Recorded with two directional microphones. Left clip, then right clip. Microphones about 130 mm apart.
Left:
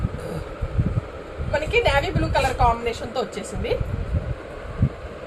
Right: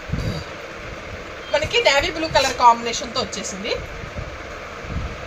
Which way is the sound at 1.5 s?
15° left (ahead or behind).